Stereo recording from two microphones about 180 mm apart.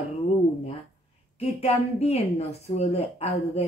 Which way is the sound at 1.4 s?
35° left (ahead or behind).